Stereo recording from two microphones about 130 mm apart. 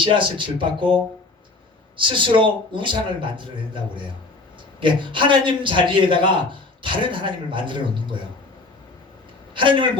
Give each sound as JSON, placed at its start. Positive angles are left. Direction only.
{"t": 0.0, "sound": "a man's voice", "side_deg": -40}
{"t": 2.0, "sound": "a man's voice", "side_deg": -40}
{"t": 4.8, "sound": "a man's voice", "side_deg": -40}
{"t": 9.6, "sound": "a man's voice", "side_deg": -40}